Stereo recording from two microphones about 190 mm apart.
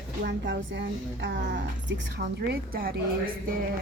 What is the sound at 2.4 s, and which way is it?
Speech, 50° right (ahead or behind).